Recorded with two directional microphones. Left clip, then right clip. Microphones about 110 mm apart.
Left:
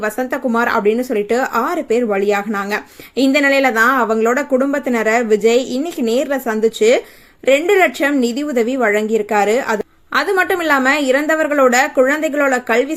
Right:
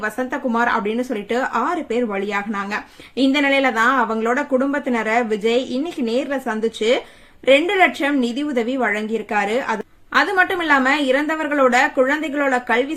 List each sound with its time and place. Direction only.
0.0 s speech: 30° left (ahead or behind)